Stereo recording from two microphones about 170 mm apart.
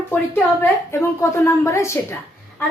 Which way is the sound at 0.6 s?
15° left (ahead or behind).